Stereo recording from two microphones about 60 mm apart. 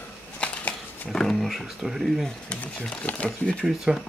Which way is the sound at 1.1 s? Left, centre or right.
Centre.